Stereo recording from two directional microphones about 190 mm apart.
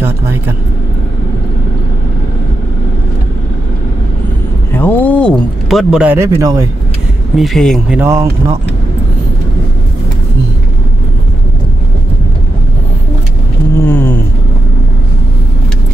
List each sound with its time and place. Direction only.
4.7 s speech: 10° left (ahead or behind); by 6.7 s 20° right (ahead or behind)
7.3 s speech: centre (ahead or behind)
8.0 s speech: 15° right (ahead or behind)
13.7 s a sound: 10° left (ahead or behind)